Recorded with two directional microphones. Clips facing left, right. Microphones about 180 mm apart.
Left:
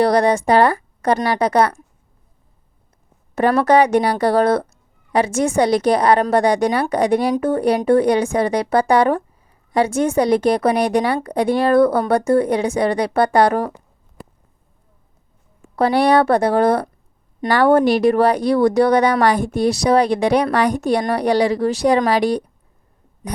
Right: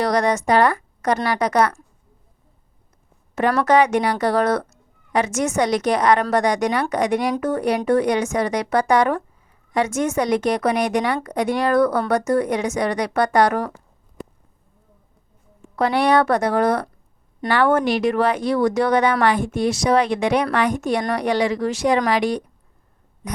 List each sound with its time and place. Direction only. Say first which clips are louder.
0.0 s a woman's voice: left 4 dB; 30° left (ahead or behind)
3.7 s a woman's voice: left 2 dB; 35° left (ahead or behind)
15.7 s a woman's voice: left 3 dB; 35° left (ahead or behind)